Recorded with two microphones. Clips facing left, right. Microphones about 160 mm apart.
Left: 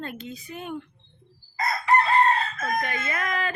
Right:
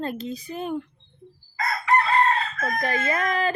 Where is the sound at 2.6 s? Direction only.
35° right (ahead or behind).